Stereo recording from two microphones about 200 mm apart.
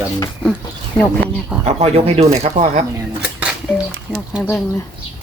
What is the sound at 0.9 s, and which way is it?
Speech, 5° left (ahead or behind).